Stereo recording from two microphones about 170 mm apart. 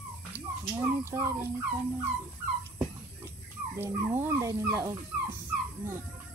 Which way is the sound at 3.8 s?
15° right (ahead or behind).